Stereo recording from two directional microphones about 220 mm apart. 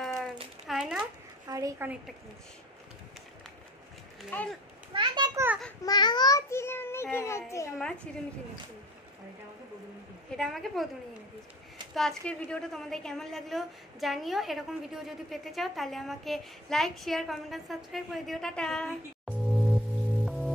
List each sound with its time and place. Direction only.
0.7 s a sound: 5° right (ahead or behind)
1.5 s a woman's voice: 10° right (ahead or behind)
4.3 s a child's voice: 5° left (ahead or behind)
4.9 s a child's voice: 20° right (ahead or behind)
5.9 s a child's voice: 20° left (ahead or behind)
10.3 s a woman's voice: centre (ahead or behind)
11.9 s a woman's voice: centre (ahead or behind)
20.2 s music: centre (ahead or behind)